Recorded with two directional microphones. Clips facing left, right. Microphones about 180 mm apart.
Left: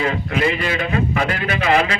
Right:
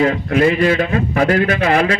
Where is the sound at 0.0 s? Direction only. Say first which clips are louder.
Right 6 dB; 45° right (ahead or behind).